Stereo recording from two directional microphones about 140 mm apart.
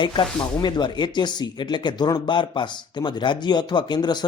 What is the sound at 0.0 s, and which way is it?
Speech, 35° left (ahead or behind).